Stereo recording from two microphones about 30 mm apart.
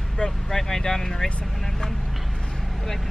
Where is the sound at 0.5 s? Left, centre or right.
Centre.